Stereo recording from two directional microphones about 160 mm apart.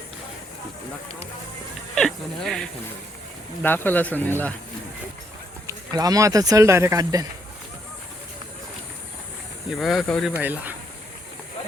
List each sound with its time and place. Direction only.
2.0 s speech: centre (ahead or behind)
5.6 s speech: 25° right (ahead or behind)
9.6 s speech: centre (ahead or behind)
10.3 s speech: 10° right (ahead or behind)